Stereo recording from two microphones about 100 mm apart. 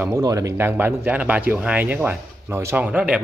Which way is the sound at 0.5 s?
20° right (ahead or behind).